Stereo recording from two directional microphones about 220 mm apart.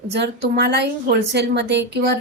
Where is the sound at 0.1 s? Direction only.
50° right (ahead or behind).